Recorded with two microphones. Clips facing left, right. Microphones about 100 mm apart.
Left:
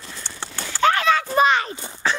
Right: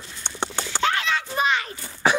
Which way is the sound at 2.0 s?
15° right (ahead or behind).